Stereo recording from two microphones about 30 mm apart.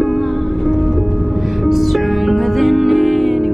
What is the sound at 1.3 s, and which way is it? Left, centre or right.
Music, centre.